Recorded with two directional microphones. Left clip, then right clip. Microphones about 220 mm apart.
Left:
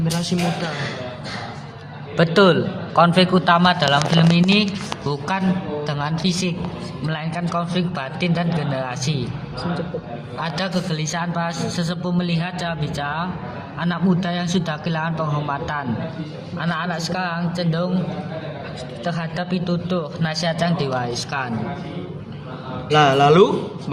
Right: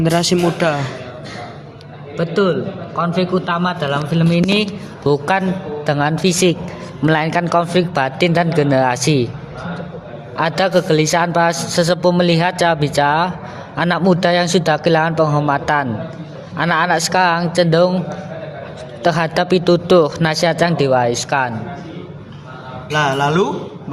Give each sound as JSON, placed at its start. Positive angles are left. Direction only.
{"t": 0.0, "sound": "a woman's voice", "side_deg": -50}
{"t": 2.1, "sound": "a man's voice", "side_deg": 20}
{"t": 3.4, "sound": "a man's voice", "side_deg": 5}
{"t": 4.3, "sound": "a woman's voice", "side_deg": -30}
{"t": 10.3, "sound": "a woman's voice", "side_deg": -45}
{"t": 19.0, "sound": "a woman's voice", "side_deg": -50}
{"t": 22.9, "sound": "a man's voice", "side_deg": 0}